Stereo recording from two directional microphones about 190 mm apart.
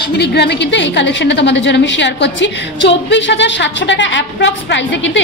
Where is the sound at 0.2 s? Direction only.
60° left (ahead or behind).